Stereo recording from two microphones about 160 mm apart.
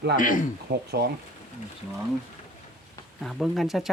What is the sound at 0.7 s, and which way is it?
Speech, 90° right.